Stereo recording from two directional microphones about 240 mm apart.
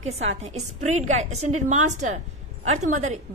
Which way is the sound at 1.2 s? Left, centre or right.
Right.